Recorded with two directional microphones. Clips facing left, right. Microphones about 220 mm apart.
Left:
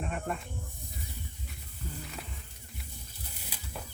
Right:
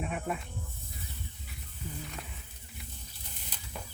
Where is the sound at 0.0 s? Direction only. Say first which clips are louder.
Right 1 dB; 5° right (ahead or behind).